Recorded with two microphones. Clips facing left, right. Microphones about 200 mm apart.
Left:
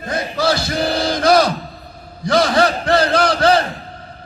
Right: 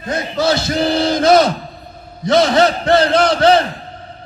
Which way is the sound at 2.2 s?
25° right (ahead or behind).